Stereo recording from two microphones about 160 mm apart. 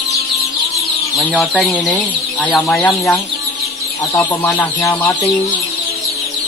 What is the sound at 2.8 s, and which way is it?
Speech, 15° left (ahead or behind).